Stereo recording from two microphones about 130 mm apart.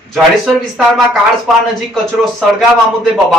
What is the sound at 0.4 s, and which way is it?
Speech, centre (ahead or behind).